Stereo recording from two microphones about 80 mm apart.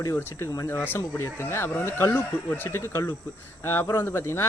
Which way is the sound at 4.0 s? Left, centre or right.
Left.